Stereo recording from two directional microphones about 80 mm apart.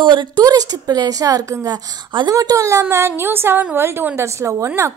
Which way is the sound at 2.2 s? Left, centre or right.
Right.